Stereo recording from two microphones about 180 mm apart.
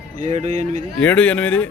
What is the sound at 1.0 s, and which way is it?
Speech, 5° left (ahead or behind).